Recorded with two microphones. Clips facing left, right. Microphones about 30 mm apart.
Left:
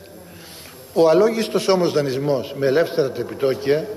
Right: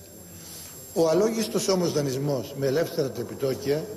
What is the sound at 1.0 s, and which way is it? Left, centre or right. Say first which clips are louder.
A man's voice: left 7 dB; left.